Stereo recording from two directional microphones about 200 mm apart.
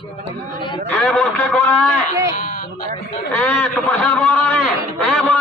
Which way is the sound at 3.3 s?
10° left (ahead or behind).